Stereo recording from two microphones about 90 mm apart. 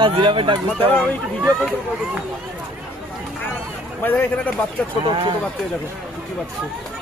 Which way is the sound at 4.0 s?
20° left (ahead or behind).